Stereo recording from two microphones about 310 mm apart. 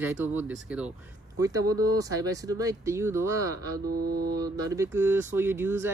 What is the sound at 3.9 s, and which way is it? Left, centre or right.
Mantra, right.